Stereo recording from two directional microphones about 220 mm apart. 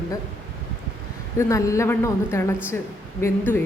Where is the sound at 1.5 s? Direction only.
15° left (ahead or behind).